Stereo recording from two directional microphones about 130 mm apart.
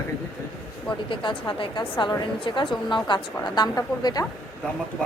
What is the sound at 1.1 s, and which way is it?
A woman's voice, 40° left (ahead or behind).